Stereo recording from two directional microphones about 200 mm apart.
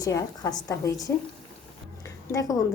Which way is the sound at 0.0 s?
15° left (ahead or behind).